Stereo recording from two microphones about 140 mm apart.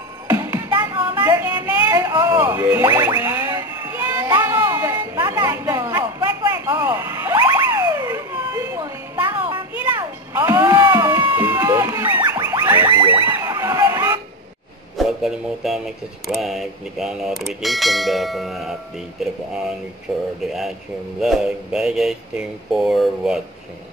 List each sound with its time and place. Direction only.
0.3 s music: 20° right (ahead or behind)
1.9 s a sound: 25° right (ahead or behind)
12.3 s music: 25° right (ahead or behind)
12.6 s music: 15° right (ahead or behind)
13.1 s a sound: 15° right (ahead or behind)
15.0 s speech: centre (ahead or behind)